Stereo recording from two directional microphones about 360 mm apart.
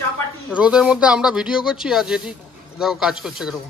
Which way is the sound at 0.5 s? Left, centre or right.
Centre.